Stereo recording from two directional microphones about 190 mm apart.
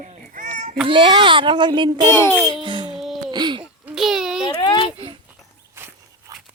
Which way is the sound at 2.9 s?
Centre (ahead or behind).